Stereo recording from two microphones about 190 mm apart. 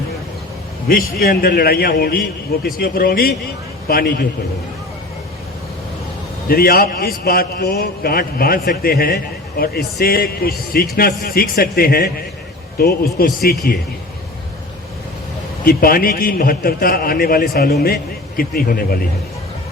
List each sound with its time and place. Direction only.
1.2 s a man's voice: 55° left (ahead or behind)
6.5 s a man's voice: 55° left (ahead or behind)
15.6 s a man's voice: 50° left (ahead or behind)